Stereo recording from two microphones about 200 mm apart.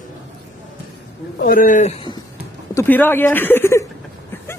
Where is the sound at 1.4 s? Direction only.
45° left (ahead or behind).